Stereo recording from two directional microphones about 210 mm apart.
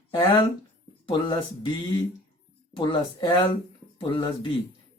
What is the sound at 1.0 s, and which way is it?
Speech, 20° left (ahead or behind).